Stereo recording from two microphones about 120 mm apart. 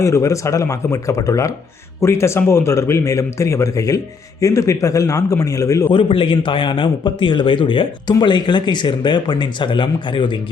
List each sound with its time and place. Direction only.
0.0 s speech: 25° left (ahead or behind)
5.9 s a man's voice: 45° left (ahead or behind)